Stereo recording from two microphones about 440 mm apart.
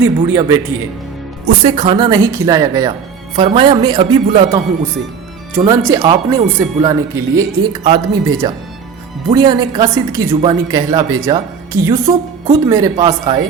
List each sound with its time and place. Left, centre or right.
0.0 s speech: centre
1.6 s speech: centre